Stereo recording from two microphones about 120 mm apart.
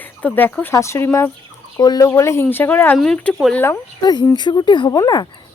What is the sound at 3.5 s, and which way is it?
Speech, 20° left (ahead or behind).